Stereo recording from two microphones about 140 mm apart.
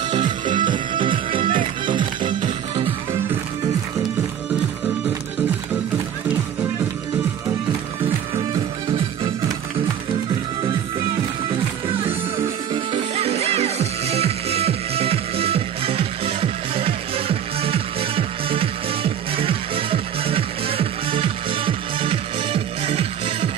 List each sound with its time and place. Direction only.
0.1 s music: 35° right (ahead or behind)
11.9 s music: 40° right (ahead or behind)